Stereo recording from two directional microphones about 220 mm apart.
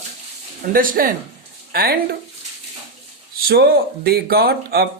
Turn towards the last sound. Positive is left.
turn(degrees=-45)  # may be behind; listen again after turning